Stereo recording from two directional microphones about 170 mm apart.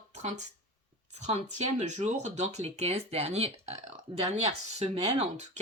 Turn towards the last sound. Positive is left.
turn(degrees=-40)  # may be behind; listen again after turning